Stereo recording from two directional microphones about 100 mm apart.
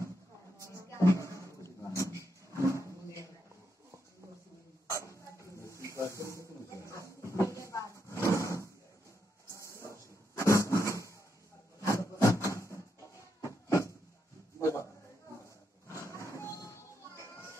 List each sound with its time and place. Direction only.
0.8 s roaring cats: 30° left (ahead or behind)
4.9 s dog: 30° left (ahead or behind)
5.9 s a sound: 30° left (ahead or behind)
9.5 s vehicle: 30° left (ahead or behind)
11.8 s a sound: 30° left (ahead or behind)
15.9 s music: 30° left (ahead or behind)